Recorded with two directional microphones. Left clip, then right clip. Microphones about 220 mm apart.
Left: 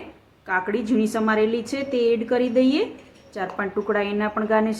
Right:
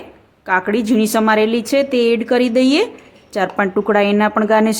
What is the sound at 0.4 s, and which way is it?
Speech, 45° right (ahead or behind).